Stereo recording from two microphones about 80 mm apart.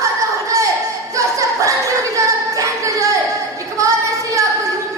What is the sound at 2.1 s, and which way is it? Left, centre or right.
Music, right.